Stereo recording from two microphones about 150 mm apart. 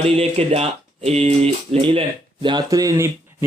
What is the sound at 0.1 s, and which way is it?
Speech, 40° right (ahead or behind).